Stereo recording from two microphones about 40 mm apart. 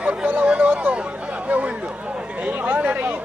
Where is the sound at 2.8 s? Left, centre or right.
Right.